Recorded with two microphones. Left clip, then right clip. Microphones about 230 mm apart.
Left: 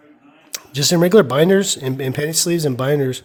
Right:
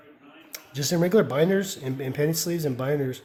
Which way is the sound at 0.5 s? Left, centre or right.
Left.